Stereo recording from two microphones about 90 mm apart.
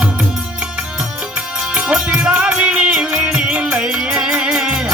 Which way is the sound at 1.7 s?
10° right (ahead or behind).